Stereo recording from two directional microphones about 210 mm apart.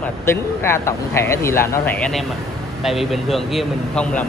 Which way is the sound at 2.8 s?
Centre (ahead or behind).